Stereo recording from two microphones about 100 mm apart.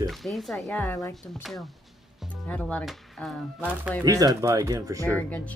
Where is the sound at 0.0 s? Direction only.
Centre (ahead or behind).